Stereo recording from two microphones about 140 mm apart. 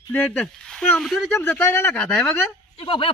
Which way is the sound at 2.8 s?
40° left (ahead or behind).